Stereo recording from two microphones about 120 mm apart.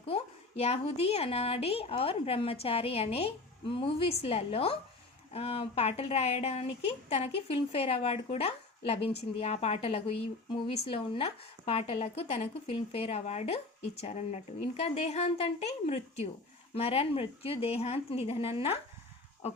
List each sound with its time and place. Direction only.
0.1 s a woman's voice: 55° left (ahead or behind)